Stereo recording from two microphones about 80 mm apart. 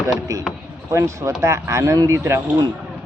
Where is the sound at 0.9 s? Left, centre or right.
Right.